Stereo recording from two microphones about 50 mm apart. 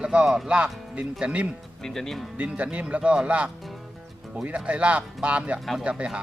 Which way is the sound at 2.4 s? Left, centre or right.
Right.